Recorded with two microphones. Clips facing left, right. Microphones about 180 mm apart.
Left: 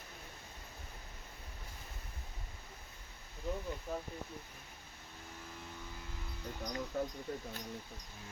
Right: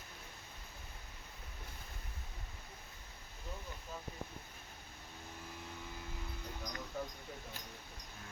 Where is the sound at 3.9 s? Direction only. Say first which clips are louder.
Left 7 dB; 60° left (ahead or behind).